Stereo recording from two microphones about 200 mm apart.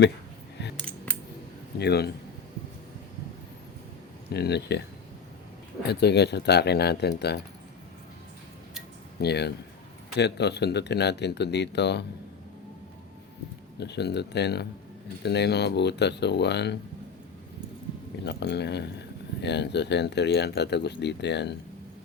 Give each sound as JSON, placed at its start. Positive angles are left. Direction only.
{"t": 0.6, "sound": "scissors", "side_deg": 60}
{"t": 1.8, "sound": "speech", "side_deg": 55}
{"t": 4.3, "sound": "speech", "side_deg": 55}
{"t": 5.8, "sound": "speech", "side_deg": 55}
{"t": 9.2, "sound": "speech", "side_deg": 55}
{"t": 13.7, "sound": "speech", "side_deg": 55}
{"t": 18.3, "sound": "speech", "side_deg": 55}